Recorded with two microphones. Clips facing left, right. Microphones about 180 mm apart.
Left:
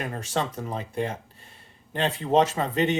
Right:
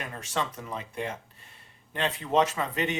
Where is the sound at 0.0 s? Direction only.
35° left (ahead or behind).